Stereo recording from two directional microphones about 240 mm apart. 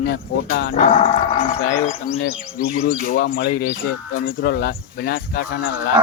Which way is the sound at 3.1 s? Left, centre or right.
Left.